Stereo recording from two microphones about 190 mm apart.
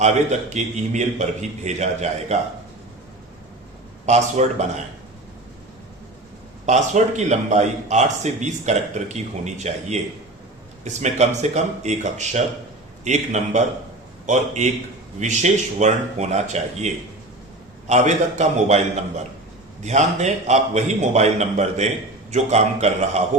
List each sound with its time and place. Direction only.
0.0 s a man's voice: 40° right (ahead or behind)
4.0 s a man's voice: 35° right (ahead or behind)
6.7 s a man's voice: 35° right (ahead or behind)
19.8 s a man's voice: 35° right (ahead or behind)